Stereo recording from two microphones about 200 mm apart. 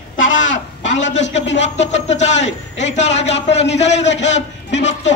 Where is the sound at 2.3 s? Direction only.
65° left (ahead or behind).